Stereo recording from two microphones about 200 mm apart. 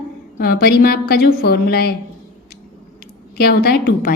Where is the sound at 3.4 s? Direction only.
50° left (ahead or behind).